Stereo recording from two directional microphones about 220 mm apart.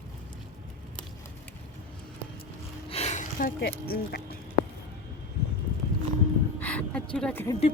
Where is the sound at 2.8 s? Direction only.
30° left (ahead or behind); by 4.2 s 45° left (ahead or behind).